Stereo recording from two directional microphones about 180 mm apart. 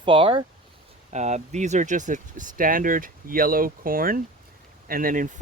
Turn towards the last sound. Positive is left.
turn(degrees=-50)  # may be behind; listen again after turning